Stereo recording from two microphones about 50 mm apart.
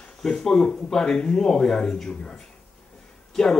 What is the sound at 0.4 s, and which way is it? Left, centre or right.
Speech, centre.